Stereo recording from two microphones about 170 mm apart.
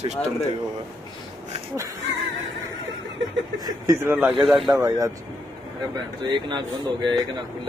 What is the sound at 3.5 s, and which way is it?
Speech, 20° right (ahead or behind).